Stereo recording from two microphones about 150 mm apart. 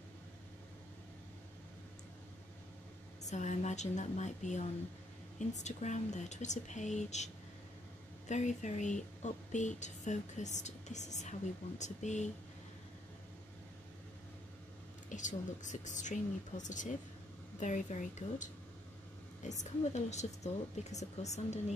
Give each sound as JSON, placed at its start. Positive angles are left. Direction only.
{"t": 3.3, "sound": "speech", "side_deg": 50}
{"t": 8.3, "sound": "speech", "side_deg": 50}
{"t": 15.0, "sound": "a woman's voice", "side_deg": 55}